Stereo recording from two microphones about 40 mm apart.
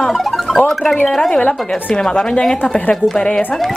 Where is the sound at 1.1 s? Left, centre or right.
Centre.